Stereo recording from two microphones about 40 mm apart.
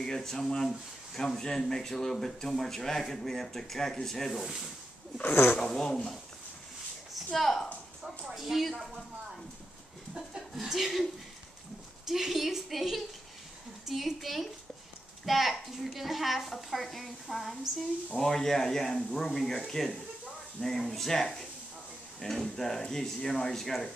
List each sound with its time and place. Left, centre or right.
0.0 s speech: centre
5.2 s speech: left
5.6 s speech: centre
7.3 s a woman's voice: centre
8.0 s a sound: centre
10.1 s speech: centre
12.1 s a woman's voice: centre
20.6 s speech: centre